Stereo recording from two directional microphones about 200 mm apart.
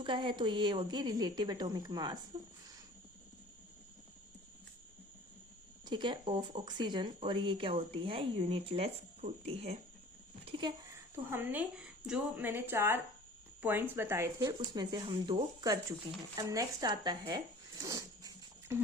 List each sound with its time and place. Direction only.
0.0 s speech: 25° right (ahead or behind)
2.3 s speech: 35° right (ahead or behind)
5.8 s speech: 25° right (ahead or behind)
11.1 s speech: 10° right (ahead or behind)